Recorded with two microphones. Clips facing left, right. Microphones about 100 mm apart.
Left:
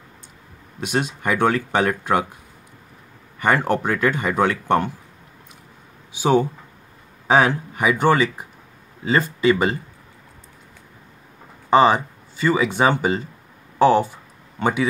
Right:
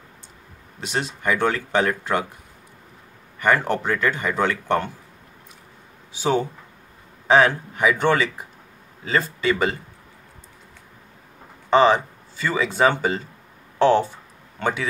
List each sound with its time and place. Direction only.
1.2 s speech: 15° left (ahead or behind)
3.4 s speech: 15° left (ahead or behind)
6.1 s speech: 15° left (ahead or behind)
11.7 s speech: 10° left (ahead or behind)